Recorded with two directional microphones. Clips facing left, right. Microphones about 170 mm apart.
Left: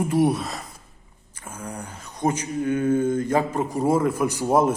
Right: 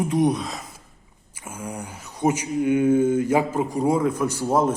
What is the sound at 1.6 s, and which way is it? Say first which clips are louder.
Speech: right 2 dB; 10° right (ahead or behind).